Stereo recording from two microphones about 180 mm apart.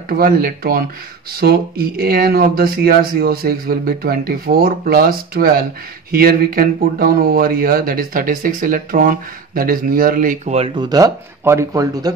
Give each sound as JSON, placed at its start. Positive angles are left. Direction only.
{"t": 0.2, "sound": "speech", "side_deg": -55}